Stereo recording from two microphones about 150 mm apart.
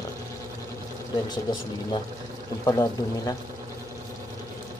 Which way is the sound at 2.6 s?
25° left (ahead or behind).